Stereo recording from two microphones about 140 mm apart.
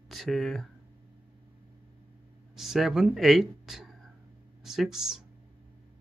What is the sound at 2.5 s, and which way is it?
Speech, 5° right (ahead or behind).